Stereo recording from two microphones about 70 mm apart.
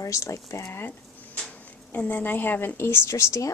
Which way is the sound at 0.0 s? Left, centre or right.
Left.